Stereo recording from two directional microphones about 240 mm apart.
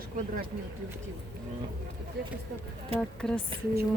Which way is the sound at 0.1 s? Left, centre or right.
Right.